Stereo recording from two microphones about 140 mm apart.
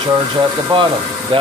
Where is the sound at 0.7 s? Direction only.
40° right (ahead or behind).